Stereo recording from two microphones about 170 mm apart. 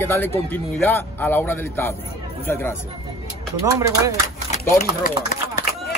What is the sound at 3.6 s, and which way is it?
Speech, 20° right (ahead or behind).